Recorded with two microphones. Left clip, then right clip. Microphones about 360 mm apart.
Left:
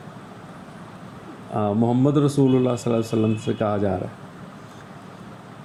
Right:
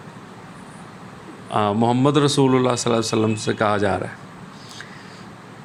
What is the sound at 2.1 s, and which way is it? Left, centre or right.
Speech, right.